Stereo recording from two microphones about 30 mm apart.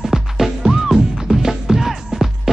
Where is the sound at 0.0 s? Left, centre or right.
Centre.